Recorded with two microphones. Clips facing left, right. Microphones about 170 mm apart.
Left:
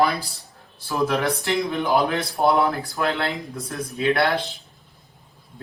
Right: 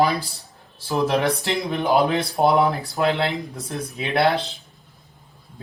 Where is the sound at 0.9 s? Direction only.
25° right (ahead or behind).